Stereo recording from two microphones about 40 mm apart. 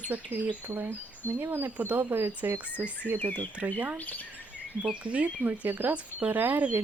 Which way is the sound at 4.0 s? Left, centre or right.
Left.